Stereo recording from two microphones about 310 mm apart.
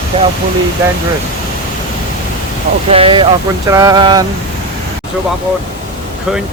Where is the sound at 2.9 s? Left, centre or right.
Centre.